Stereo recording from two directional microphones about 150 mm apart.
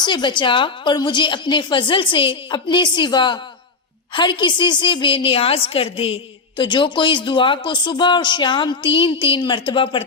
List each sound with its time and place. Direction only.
0.0 s speech: 30° left (ahead or behind)